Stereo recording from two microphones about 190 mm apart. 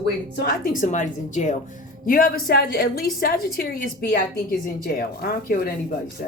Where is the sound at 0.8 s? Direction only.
40° left (ahead or behind).